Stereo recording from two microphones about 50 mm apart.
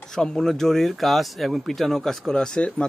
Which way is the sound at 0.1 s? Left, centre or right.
Centre.